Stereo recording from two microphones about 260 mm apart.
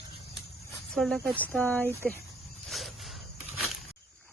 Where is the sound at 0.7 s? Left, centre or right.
Centre.